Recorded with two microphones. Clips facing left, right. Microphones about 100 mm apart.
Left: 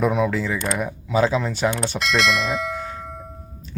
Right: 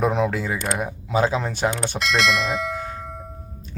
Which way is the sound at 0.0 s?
35° right (ahead or behind).